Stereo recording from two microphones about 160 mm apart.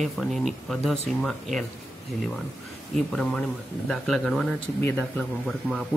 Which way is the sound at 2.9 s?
5° left (ahead or behind).